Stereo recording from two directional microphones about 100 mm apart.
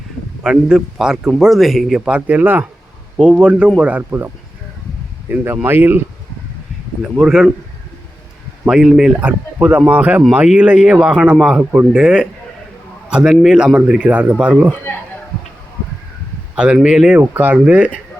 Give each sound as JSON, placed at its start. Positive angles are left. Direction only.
{"t": 0.4, "sound": "a man's voice", "side_deg": -5}
{"t": 5.3, "sound": "speech", "side_deg": -20}
{"t": 7.0, "sound": "a man's voice", "side_deg": -5}
{"t": 8.6, "sound": "a man's voice", "side_deg": -5}
{"t": 9.2, "sound": "a man's voice", "side_deg": -15}
{"t": 16.6, "sound": "a man's voice", "side_deg": -10}